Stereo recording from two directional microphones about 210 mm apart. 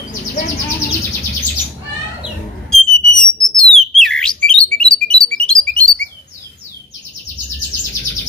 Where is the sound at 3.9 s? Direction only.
Centre (ahead or behind).